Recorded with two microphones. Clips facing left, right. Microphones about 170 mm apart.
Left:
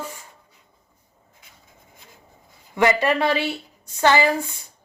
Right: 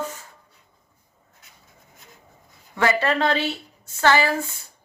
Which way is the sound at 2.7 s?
15° left (ahead or behind).